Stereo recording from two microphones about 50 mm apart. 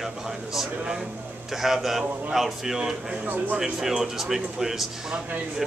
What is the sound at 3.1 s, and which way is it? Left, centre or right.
Speech, right.